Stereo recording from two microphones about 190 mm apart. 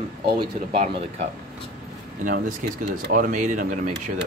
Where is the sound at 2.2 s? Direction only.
45° right (ahead or behind).